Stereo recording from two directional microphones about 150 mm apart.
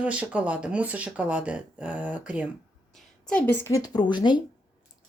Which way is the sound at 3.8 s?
30° left (ahead or behind).